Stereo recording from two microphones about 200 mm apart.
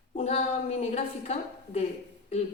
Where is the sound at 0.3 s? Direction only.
30° left (ahead or behind).